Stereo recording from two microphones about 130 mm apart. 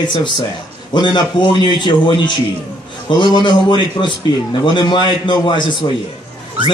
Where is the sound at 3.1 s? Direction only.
35° left (ahead or behind).